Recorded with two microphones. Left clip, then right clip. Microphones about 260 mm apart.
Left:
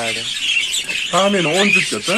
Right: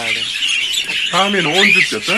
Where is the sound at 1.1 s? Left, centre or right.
Left.